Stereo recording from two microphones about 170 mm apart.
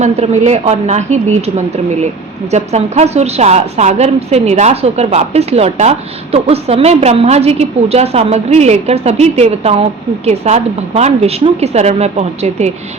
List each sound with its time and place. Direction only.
0.0 s a woman's voice: 40° right (ahead or behind)